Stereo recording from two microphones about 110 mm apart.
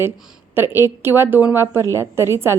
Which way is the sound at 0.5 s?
20° right (ahead or behind).